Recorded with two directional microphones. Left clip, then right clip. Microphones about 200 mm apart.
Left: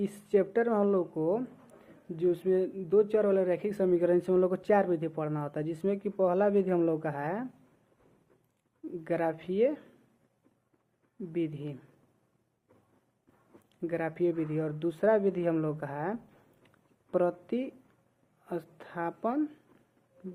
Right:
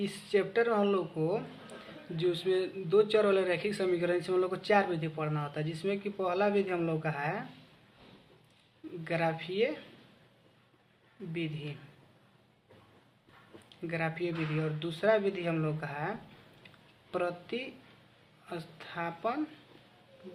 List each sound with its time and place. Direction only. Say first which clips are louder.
0.1 s speech: left 3 dB; 35° left (ahead or behind)
9.0 s speech: left 1 dB; 40° left (ahead or behind)
13.8 s speech: left 4 dB; 40° left (ahead or behind)
18.8 s speech: even; 35° left (ahead or behind)